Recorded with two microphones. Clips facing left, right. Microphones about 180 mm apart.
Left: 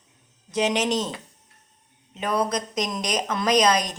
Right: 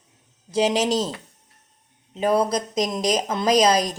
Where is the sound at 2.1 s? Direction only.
30° right (ahead or behind).